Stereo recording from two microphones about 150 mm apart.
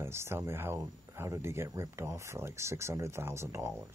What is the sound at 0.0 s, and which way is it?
Speech, 15° right (ahead or behind).